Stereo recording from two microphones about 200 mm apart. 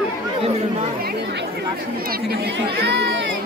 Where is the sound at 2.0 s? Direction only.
50° right (ahead or behind).